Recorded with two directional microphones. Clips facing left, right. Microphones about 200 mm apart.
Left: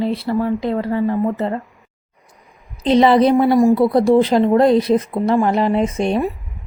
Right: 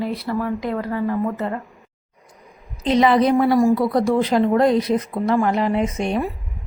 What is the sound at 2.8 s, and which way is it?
Speech, 30° left (ahead or behind).